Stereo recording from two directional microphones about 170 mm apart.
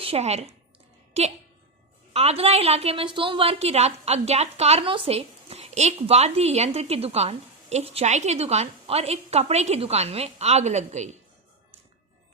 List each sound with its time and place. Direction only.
0.0 s a woman's voice: 35° right (ahead or behind)